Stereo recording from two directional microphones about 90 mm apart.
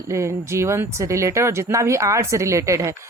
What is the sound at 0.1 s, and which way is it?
Speech, 35° right (ahead or behind).